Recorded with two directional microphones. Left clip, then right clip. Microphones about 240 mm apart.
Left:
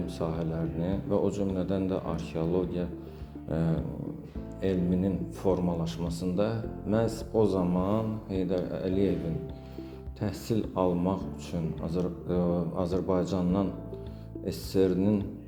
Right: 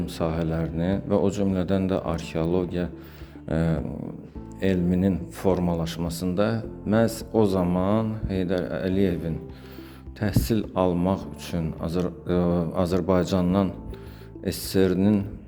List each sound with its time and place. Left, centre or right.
0.0 s speech: right
10.2 s speech: right